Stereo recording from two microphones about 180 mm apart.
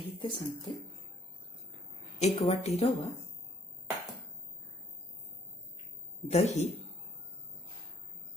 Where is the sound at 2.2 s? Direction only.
35° left (ahead or behind).